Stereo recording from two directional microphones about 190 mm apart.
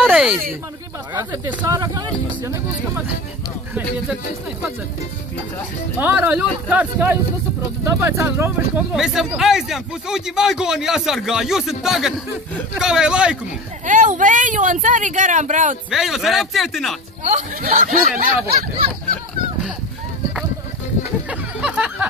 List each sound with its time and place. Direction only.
0.0 s a sound: centre (ahead or behind)
1.1 s speech: 15° right (ahead or behind)
5.9 s speech: 10° right (ahead or behind)
8.9 s speech: centre (ahead or behind)
13.8 s speech: 40° right (ahead or behind)
15.9 s speech: centre (ahead or behind)
17.2 s speech: 40° right (ahead or behind)
21.3 s a sound: 5° right (ahead or behind)